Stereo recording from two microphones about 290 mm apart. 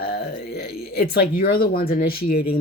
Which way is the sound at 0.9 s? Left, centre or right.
Left.